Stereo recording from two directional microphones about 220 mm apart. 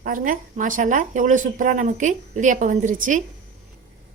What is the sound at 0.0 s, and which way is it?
A woman's voice, 40° right (ahead or behind).